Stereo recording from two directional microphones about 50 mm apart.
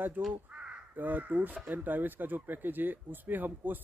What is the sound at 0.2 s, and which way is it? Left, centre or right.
Speech, right.